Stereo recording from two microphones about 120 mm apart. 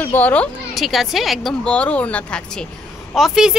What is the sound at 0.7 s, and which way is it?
A woman's voice, centre (ahead or behind).